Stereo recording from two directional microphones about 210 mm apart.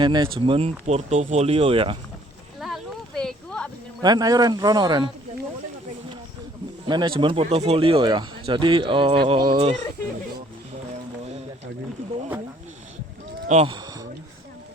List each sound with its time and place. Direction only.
0.0 s speech: 20° right (ahead or behind)
2.6 s a sound: centre (ahead or behind)
4.0 s speech: 20° right (ahead or behind)
6.8 s speech: 20° right (ahead or behind)
13.5 s speech: 30° right (ahead or behind)
13.7 s a sound: 20° right (ahead or behind)